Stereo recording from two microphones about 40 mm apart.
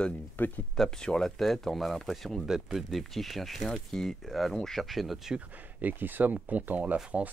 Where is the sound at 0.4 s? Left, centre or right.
Left.